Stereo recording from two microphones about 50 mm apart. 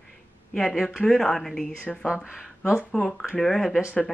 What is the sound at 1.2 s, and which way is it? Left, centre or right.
Speech, centre.